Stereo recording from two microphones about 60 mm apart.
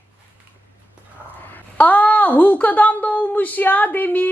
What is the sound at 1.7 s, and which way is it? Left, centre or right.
A woman's voice, left.